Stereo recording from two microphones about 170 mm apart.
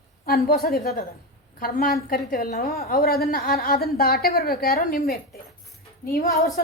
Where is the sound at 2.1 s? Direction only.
60° left (ahead or behind).